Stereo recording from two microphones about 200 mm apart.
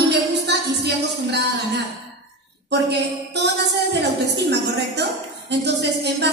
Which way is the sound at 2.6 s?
55° right (ahead or behind).